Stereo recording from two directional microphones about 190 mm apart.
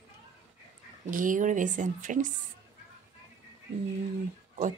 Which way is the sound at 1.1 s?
45° right (ahead or behind).